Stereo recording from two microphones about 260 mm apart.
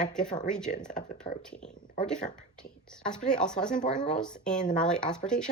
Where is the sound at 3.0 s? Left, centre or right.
Centre.